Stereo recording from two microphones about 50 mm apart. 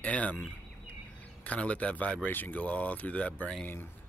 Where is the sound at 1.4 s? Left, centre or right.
Left.